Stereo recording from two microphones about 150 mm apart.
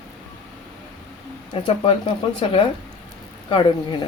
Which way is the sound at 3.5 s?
30° left (ahead or behind).